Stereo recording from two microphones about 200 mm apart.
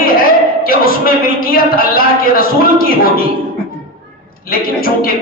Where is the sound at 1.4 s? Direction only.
45° left (ahead or behind).